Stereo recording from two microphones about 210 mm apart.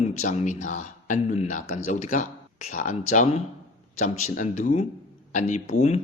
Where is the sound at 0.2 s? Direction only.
35° left (ahead or behind).